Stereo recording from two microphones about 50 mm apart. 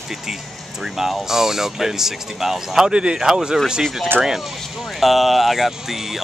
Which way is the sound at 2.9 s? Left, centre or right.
Centre.